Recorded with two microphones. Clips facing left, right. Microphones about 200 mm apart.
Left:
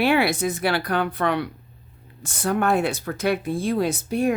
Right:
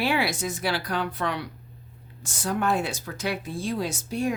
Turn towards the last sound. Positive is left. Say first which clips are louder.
# left 5 dB
turn(degrees=60)  # may be behind; listen again after turning